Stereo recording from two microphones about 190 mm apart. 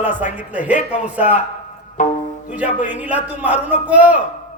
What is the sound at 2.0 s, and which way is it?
Speech, 40° left (ahead or behind).